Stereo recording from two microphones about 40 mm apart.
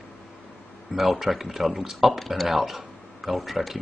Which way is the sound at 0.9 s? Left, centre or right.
Centre.